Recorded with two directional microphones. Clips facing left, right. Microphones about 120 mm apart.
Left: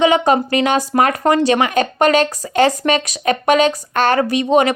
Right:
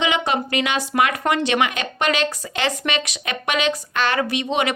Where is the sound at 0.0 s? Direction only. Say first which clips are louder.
Left 8 dB; 40° left (ahead or behind).